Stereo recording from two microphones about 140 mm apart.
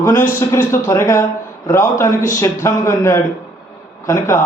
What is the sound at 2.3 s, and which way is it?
A man's voice, 20° left (ahead or behind).